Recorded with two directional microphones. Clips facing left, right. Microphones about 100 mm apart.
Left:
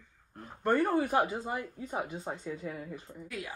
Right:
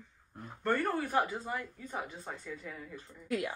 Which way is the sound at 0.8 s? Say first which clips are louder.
Left 4 dB; 15° left (ahead or behind).